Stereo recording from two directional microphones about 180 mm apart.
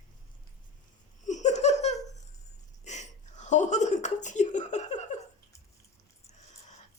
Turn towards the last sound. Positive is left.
turn(degrees=40)  # may be behind; listen again after turning